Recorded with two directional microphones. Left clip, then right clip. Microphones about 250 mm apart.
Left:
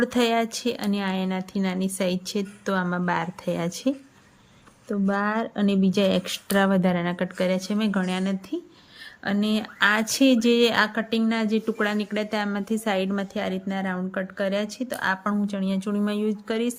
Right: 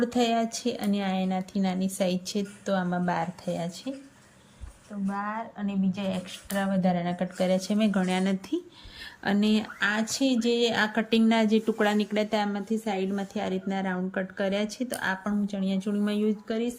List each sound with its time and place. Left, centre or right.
0.0 s a woman's voice: centre
5.9 s speech: left
6.8 s a woman's voice: centre